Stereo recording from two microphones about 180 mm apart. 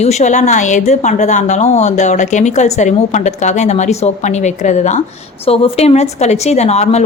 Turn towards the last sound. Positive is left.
turn(degrees=35)  # may be behind; listen again after turning